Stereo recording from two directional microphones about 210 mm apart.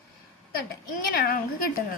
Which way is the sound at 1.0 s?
45° left (ahead or behind).